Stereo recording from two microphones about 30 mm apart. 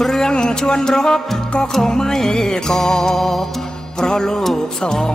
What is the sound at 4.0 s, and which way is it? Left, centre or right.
Music, left.